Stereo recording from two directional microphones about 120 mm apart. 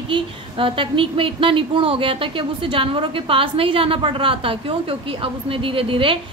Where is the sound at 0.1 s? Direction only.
45° right (ahead or behind).